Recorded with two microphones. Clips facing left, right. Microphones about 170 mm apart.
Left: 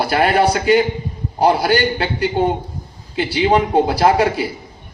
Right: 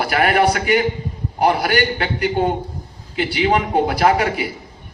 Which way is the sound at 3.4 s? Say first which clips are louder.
Left 3 dB; 30° left (ahead or behind).